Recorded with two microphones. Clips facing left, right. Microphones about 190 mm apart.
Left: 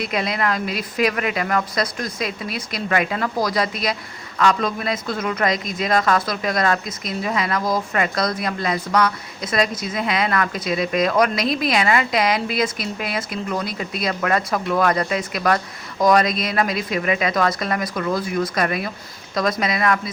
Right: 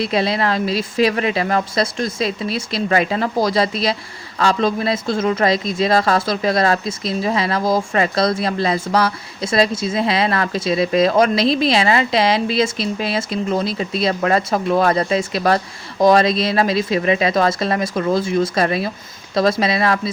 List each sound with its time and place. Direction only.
0.0 s speech: 30° right (ahead or behind)